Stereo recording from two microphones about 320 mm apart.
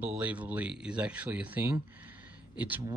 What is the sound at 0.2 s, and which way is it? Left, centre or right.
Speech, centre.